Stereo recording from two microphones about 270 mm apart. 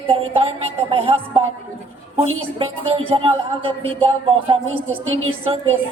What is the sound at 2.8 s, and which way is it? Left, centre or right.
Speech, centre.